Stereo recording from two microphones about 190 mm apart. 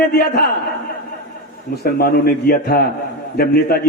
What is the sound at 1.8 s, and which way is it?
A man's voice, 55° left (ahead or behind).